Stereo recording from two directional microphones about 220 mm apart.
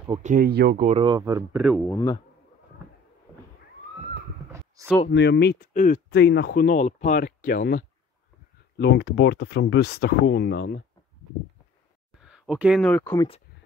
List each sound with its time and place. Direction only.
0.1 s speech: 35° right (ahead or behind)
0.8 s speech: 25° right (ahead or behind)
1.9 s speech: 15° left (ahead or behind)
4.5 s a sound: 10° right (ahead or behind)
5.1 s speech: 50° left (ahead or behind)
8.7 s speech: 50° left (ahead or behind)
12.2 s speech: 5° right (ahead or behind)